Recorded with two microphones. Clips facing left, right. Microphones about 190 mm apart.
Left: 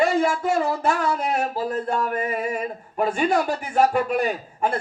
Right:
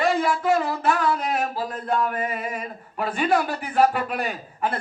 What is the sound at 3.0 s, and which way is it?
Speech, 45° left (ahead or behind).